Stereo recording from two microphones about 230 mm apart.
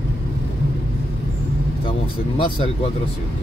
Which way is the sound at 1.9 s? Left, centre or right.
Left.